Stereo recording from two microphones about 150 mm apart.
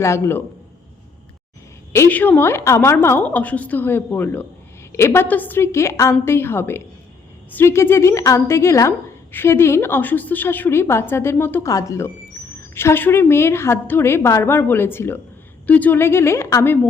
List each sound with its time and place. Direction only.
0.0 s a woman's voice: 15° left (ahead or behind)
1.9 s a woman's voice: 15° left (ahead or behind)